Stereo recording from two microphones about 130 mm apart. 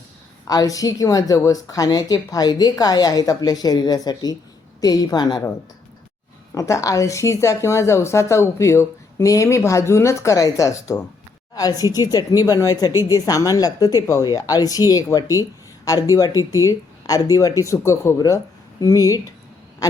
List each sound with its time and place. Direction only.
0.4 s a woman's voice: 30° left (ahead or behind)
6.5 s a woman's voice: 25° left (ahead or behind)